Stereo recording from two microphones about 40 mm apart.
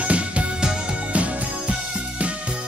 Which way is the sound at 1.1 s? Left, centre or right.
Right.